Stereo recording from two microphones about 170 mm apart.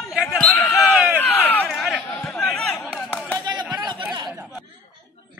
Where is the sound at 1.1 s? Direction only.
15° left (ahead or behind).